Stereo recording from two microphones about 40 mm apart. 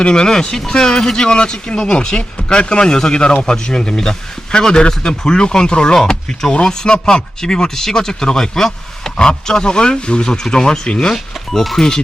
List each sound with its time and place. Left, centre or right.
0.0 s speech: centre
11.1 s speech: centre